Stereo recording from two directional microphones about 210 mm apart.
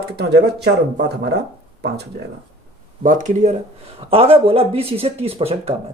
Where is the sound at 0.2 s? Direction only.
50° right (ahead or behind).